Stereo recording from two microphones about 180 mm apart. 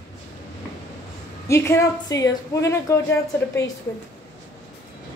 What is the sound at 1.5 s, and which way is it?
A woman's voice, 15° left (ahead or behind).